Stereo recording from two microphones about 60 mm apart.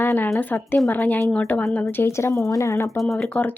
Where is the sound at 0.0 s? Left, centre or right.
Left.